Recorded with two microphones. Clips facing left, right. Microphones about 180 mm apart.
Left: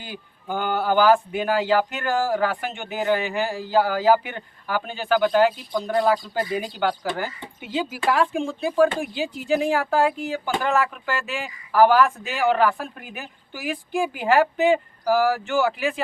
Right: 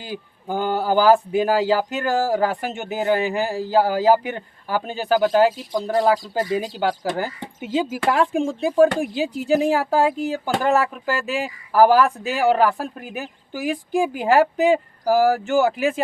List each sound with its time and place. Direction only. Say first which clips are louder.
0.0 s speech: right 5 dB; 35° right (ahead or behind)
6.6 s speech: right 2 dB; 40° right (ahead or behind)